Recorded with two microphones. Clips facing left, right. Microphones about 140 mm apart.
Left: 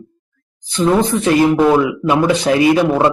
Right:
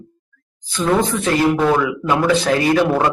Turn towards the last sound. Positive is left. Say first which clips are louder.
# left 3 dB
turn(degrees=15)  # may be behind; listen again after turning